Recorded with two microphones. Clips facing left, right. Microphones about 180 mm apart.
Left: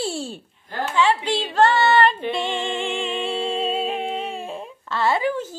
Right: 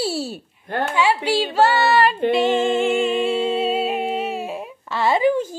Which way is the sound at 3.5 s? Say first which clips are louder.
Right 3 dB; 10° right (ahead or behind).